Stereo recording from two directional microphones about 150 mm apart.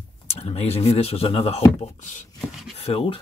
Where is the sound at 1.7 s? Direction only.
55° left (ahead or behind).